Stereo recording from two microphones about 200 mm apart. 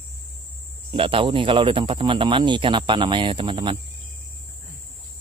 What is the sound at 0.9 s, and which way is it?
Speech, 25° right (ahead or behind).